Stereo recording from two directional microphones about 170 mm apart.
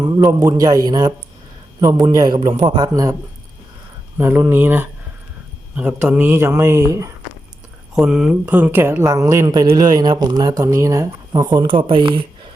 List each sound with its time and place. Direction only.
0.0 s speech: 20° right (ahead or behind)
4.2 s a man's voice: 15° right (ahead or behind)
7.9 s speech: 5° right (ahead or behind); by 12.2 s 30° right (ahead or behind)